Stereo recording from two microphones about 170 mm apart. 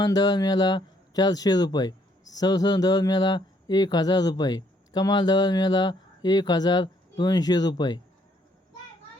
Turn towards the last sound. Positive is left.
turn(degrees=25)  # may be behind; listen again after turning